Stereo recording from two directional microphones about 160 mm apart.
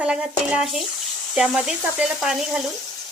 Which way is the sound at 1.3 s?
5° right (ahead or behind).